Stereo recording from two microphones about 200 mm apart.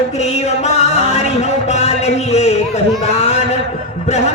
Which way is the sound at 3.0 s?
30° left (ahead or behind).